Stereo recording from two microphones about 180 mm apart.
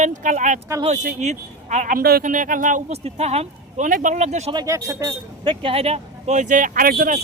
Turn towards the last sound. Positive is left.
turn(degrees=-50)  # may be behind; listen again after turning